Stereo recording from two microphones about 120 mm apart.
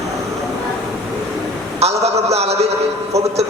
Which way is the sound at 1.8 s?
60° right (ahead or behind).